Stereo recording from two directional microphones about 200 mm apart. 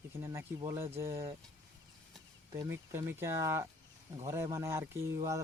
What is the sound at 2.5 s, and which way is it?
Speech, 15° right (ahead or behind).